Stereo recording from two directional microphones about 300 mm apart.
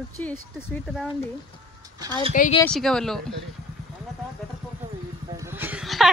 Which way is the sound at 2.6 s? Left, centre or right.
Centre.